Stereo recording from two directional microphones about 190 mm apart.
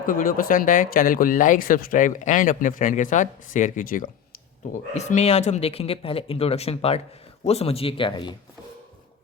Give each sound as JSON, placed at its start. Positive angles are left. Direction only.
{"t": 0.0, "sound": "speech", "side_deg": 45}